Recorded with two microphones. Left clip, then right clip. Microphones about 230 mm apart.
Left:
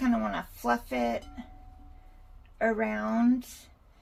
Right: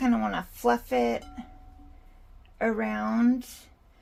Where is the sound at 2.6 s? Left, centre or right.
Right.